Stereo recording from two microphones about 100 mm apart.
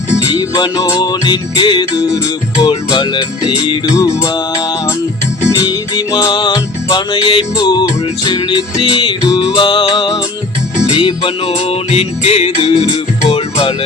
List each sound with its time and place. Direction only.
0.3 s music: 40° left (ahead or behind)
3.9 s music: 35° left (ahead or behind); by 7.4 s 60° left (ahead or behind)
7.5 s music: 45° left (ahead or behind); by 13.4 s 75° left (ahead or behind)